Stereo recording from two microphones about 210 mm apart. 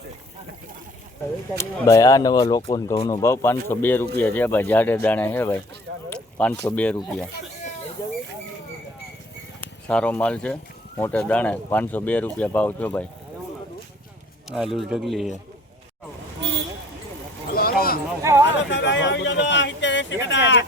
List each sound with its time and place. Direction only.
1.5 s speech: 15° left (ahead or behind)
9.6 s speech: 5° left (ahead or behind)
14.5 s speech: centre (ahead or behind)
17.5 s a sound: 45° left (ahead or behind)
18.2 s speech: 15° right (ahead or behind)
18.4 s speech: 60° left (ahead or behind)